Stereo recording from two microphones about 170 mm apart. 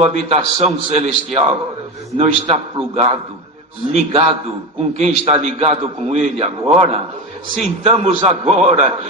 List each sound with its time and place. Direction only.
0.0 s a man's voice: 40° right (ahead or behind)